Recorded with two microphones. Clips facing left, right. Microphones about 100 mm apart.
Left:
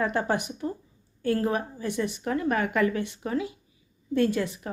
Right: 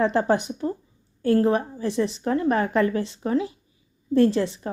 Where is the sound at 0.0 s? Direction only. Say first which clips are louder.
Right 5 dB; 30° right (ahead or behind).